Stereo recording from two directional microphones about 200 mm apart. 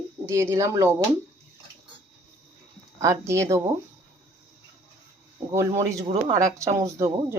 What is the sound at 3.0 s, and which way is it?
Speech, 15° right (ahead or behind).